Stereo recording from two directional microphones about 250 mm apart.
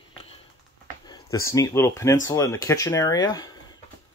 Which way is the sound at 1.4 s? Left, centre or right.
Centre.